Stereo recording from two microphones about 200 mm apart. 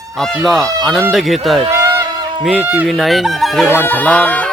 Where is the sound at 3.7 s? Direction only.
10° left (ahead or behind).